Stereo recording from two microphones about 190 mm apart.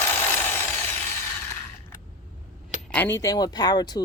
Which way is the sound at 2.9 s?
10° left (ahead or behind).